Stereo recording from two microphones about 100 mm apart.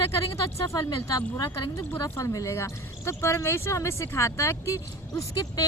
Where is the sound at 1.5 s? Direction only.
25° left (ahead or behind).